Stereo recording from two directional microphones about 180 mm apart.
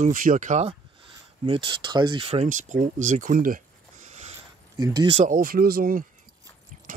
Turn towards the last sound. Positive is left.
turn(degrees=-50)  # may be behind; listen again after turning